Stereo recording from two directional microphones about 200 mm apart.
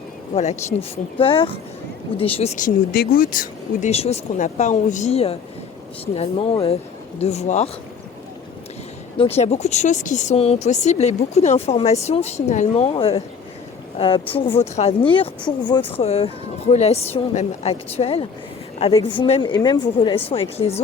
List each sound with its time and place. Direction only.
0.3 s speech: 30° left (ahead or behind)
9.1 s speech: 30° left (ahead or behind)